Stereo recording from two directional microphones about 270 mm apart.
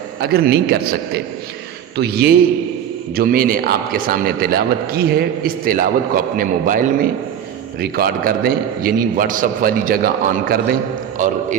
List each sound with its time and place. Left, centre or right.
0.2 s a man's voice: right